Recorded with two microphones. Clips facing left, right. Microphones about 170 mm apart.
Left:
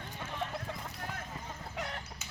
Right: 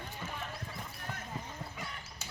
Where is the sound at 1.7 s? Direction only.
70° left (ahead or behind).